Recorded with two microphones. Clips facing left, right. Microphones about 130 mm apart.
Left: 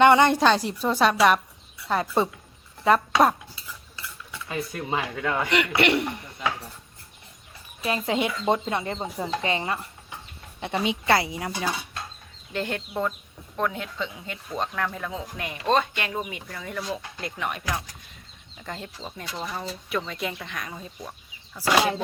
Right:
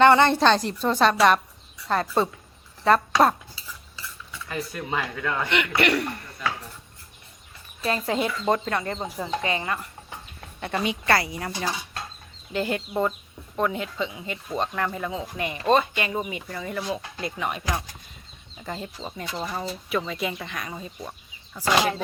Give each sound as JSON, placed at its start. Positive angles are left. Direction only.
{"t": 0.0, "sound": "a woman's voice", "side_deg": 15}
{"t": 4.4, "sound": "a woman's voice", "side_deg": 20}
{"t": 5.5, "sound": "a man's voice", "side_deg": 30}
{"t": 7.9, "sound": "a woman's voice", "side_deg": 15}
{"t": 9.4, "sound": "a man's voice", "side_deg": 30}
{"t": 10.8, "sound": "a man's voice", "side_deg": 20}
{"t": 11.3, "sound": "a woman's voice", "side_deg": 10}
{"t": 12.5, "sound": "speech", "side_deg": -5}